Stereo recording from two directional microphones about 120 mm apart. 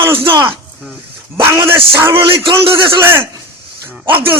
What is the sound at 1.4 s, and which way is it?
Speech, 20° right (ahead or behind).